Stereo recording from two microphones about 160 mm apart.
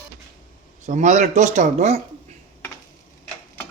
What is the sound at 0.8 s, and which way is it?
Speech, 50° right (ahead or behind).